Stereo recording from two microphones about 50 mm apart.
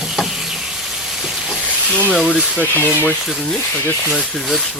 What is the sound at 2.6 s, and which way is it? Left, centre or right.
Speech, left.